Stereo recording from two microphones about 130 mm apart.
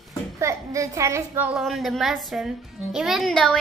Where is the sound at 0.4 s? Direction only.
25° right (ahead or behind).